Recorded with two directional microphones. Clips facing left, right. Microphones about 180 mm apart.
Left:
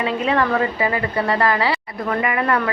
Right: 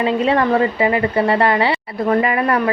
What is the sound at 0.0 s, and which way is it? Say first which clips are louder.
A woman's voice: right 4 dB; 30° right (ahead or behind).